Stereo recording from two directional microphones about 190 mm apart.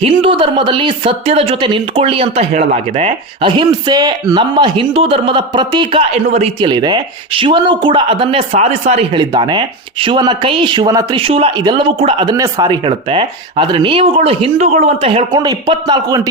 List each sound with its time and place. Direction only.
0.0 s a woman's voice: 25° right (ahead or behind)
9.3 s a woman's voice: 25° right (ahead or behind)
15.4 s a woman's voice: 20° right (ahead or behind)